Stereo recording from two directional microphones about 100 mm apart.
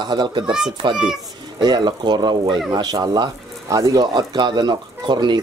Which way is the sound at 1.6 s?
45° right (ahead or behind).